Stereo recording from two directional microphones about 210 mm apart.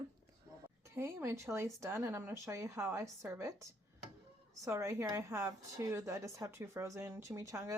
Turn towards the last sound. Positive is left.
turn(degrees=-15)  # may be behind; listen again after turning